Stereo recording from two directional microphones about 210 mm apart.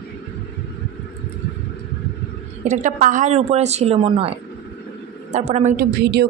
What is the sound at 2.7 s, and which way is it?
A woman's voice, 40° right (ahead or behind).